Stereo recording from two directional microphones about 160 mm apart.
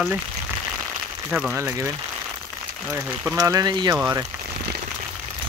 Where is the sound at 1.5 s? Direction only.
15° right (ahead or behind).